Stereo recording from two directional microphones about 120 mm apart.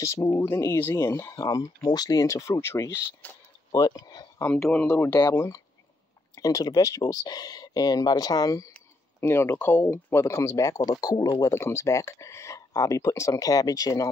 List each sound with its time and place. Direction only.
0.0 s speech: 25° left (ahead or behind)
3.7 s speech: 35° left (ahead or behind)
4.6 s speech: centre (ahead or behind)
4.8 s speech: 20° left (ahead or behind)